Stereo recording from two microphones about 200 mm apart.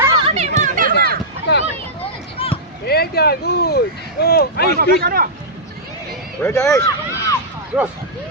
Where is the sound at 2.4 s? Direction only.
25° left (ahead or behind).